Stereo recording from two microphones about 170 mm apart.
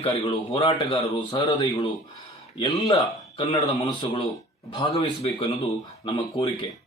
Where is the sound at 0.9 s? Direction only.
20° left (ahead or behind).